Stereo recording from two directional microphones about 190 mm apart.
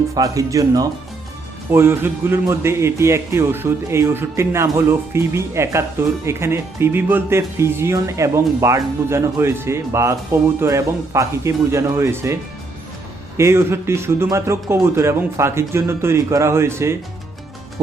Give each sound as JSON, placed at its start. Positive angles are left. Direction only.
{"t": 0.1, "sound": "a man's voice", "side_deg": -15}